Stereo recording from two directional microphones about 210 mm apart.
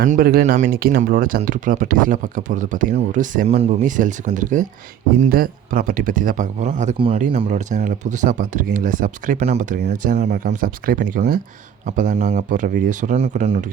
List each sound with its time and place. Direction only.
0.0 s speech: 45° right (ahead or behind)